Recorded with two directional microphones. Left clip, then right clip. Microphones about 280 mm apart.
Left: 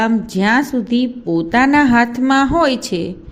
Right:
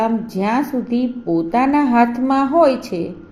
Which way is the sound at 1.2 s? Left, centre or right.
Left.